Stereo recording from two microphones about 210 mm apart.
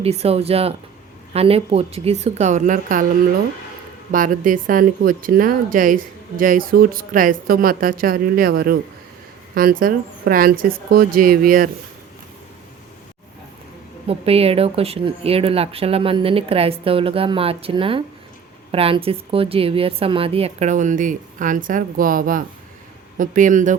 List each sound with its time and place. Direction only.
0.0 s a woman's voice: 30° right (ahead or behind)
4.1 s a woman's voice: 40° right (ahead or behind)
14.1 s a woman's voice: 30° right (ahead or behind)